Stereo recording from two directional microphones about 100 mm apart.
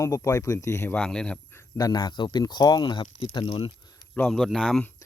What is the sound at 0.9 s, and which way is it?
Speech, 10° left (ahead or behind).